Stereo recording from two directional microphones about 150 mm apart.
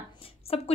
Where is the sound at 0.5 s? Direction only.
40° left (ahead or behind).